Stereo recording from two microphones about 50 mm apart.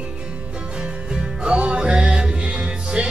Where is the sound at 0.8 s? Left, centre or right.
Centre.